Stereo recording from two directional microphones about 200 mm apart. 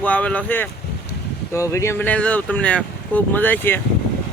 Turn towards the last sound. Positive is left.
turn(degrees=10)  # may be behind; listen again after turning